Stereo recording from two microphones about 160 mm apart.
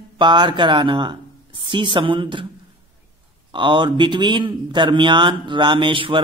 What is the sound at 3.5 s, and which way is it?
Speech, 30° right (ahead or behind).